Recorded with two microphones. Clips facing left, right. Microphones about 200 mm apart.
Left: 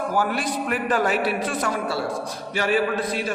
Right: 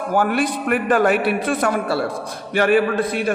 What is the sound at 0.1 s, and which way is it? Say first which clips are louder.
A man's voice: right 9 dB; 60° right (ahead or behind).